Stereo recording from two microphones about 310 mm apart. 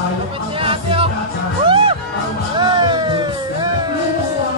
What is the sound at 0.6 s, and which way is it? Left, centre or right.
Music, centre.